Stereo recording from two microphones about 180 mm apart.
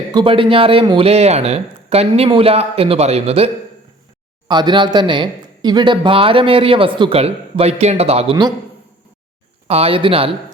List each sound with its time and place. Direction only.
0.1 s speech: 25° right (ahead or behind)
4.4 s speech: 25° right (ahead or behind)
9.6 s speech: 35° right (ahead or behind)